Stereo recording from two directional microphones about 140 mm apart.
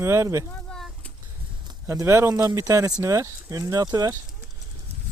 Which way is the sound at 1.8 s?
20° right (ahead or behind).